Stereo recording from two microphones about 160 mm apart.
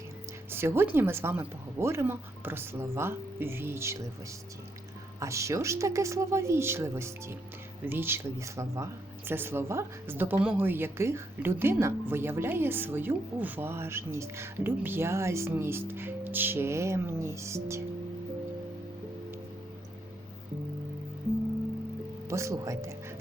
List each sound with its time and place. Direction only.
0.5 s a woman's voice: 15° right (ahead or behind)
5.2 s a woman's voice: 20° right (ahead or behind)
22.3 s a woman's voice: 20° right (ahead or behind)